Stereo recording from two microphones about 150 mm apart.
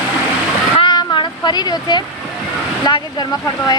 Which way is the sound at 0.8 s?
30° left (ahead or behind).